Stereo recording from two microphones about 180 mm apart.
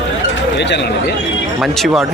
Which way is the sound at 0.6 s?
70° left (ahead or behind).